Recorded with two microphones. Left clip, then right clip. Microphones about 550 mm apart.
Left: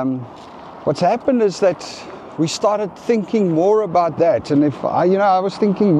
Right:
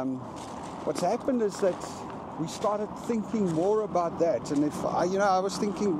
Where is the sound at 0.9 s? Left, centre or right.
Left.